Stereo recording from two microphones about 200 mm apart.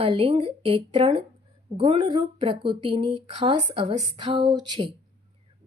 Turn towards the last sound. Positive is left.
turn(degrees=-25)  # may be behind; listen again after turning